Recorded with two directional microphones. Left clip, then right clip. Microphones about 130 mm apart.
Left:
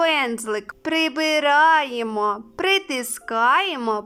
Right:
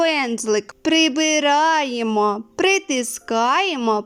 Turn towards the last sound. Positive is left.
turn(degrees=-30)  # may be behind; listen again after turning